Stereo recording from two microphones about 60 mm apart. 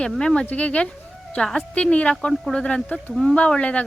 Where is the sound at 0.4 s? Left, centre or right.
Left.